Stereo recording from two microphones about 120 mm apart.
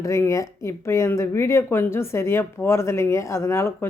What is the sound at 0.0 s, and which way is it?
A woman's voice, 25° left (ahead or behind).